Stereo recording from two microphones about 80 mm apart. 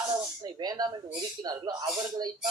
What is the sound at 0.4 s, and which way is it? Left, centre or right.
Speech, right.